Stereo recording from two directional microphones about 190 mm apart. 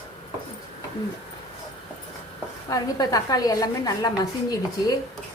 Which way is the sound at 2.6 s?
20° left (ahead or behind).